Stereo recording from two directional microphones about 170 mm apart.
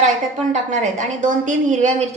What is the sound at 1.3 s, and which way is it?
Speech, 50° right (ahead or behind).